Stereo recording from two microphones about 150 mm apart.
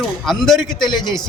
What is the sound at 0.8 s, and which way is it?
Speech, 30° left (ahead or behind).